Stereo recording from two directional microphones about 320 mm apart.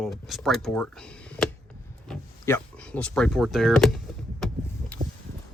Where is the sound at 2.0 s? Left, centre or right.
Centre.